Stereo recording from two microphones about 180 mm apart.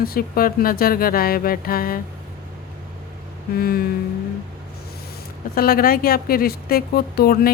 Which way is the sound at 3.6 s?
60° left (ahead or behind).